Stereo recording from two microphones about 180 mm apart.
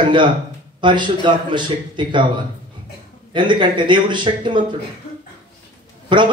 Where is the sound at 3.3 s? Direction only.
25° right (ahead or behind).